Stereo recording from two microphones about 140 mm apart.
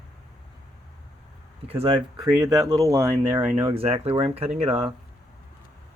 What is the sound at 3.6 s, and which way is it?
Speech, 45° right (ahead or behind).